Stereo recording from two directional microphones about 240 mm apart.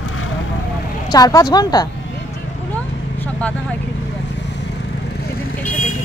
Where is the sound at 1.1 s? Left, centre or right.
Centre.